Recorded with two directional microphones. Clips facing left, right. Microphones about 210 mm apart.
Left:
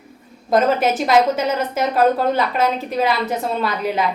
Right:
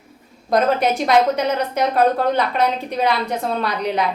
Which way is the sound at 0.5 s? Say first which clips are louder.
Left 1 dB; centre (ahead or behind).